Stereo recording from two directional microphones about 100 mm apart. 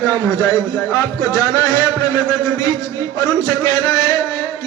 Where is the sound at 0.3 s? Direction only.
35° left (ahead or behind).